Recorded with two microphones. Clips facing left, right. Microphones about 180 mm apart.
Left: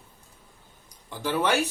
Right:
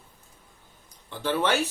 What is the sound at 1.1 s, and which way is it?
Speech, 10° left (ahead or behind).